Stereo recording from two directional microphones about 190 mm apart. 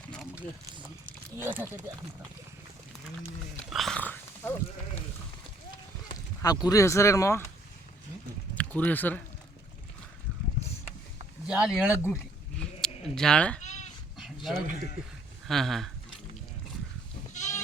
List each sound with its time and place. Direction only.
1.4 s speech: 10° right (ahead or behind)
3.7 s a sound: centre (ahead or behind)
6.1 s speech: 20° left (ahead or behind)
8.5 s speech: 10° left (ahead or behind)
11.4 s speech: 5° right (ahead or behind)
11.7 s a sound: 15° left (ahead or behind)
13.6 s goat: 40° left (ahead or behind)
14.2 s dog: centre (ahead or behind)
15.4 s speech: centre (ahead or behind)
17.3 s goat: 40° left (ahead or behind)